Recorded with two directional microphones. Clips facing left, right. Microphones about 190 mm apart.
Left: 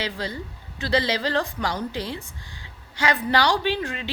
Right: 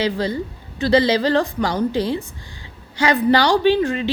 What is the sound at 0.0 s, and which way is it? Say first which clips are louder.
A woman's voice: right 9 dB; 25° right (ahead or behind).